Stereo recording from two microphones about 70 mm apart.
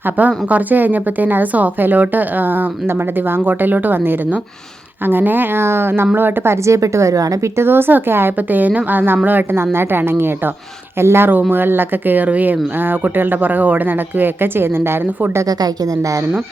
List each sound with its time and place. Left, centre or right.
0.0 s speech: right
7.5 s speech: right
15.4 s a woman's voice: right